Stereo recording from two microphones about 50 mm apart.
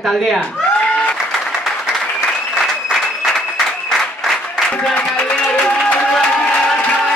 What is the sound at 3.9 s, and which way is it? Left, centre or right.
Applause, centre.